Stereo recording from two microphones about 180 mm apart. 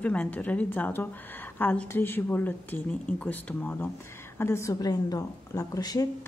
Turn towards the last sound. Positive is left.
turn(degrees=20)  # may be behind; listen again after turning